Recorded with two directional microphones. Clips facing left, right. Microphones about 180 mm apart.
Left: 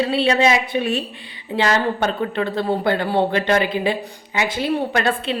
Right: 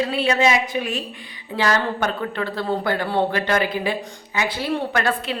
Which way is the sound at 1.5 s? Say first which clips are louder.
Left 2 dB; 20° left (ahead or behind).